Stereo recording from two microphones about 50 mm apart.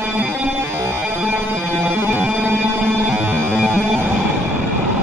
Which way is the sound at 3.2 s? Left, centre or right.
Right.